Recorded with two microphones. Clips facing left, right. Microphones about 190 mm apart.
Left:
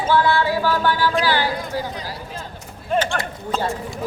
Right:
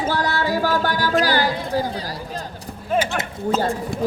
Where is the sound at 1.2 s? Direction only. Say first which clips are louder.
Right 1 dB; 40° right (ahead or behind).